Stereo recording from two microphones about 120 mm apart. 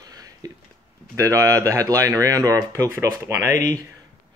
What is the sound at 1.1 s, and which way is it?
Speech, 25° right (ahead or behind).